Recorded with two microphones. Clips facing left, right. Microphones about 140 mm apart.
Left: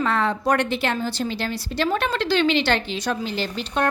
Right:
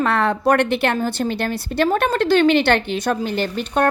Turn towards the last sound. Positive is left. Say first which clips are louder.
# right 5 dB
turn(degrees=-55)  # may be behind; listen again after turning